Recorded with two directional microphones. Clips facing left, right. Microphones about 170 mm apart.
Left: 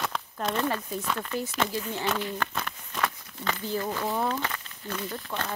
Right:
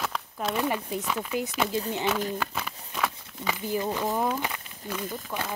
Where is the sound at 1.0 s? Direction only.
5° right (ahead or behind).